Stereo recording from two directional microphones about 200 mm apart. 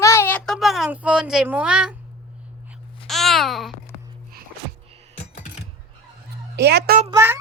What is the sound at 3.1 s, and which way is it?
Babbling, centre (ahead or behind).